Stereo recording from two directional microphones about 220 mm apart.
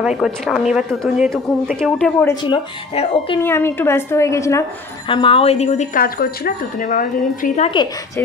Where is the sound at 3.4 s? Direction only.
10° left (ahead or behind); by 7.7 s 35° left (ahead or behind).